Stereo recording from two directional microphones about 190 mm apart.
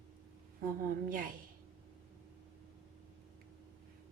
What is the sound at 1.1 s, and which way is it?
Speech, 45° right (ahead or behind).